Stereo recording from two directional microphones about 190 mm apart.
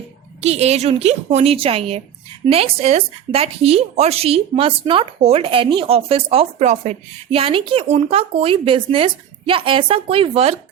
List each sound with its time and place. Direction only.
0.4 s a woman's voice: 35° right (ahead or behind)